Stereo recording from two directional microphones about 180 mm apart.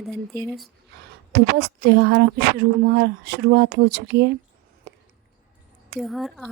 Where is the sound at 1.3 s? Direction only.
65° right (ahead or behind).